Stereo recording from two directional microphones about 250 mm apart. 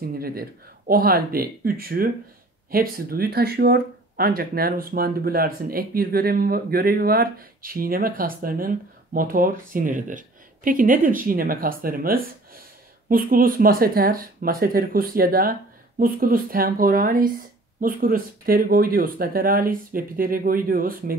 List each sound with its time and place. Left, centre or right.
0.2 s speech: right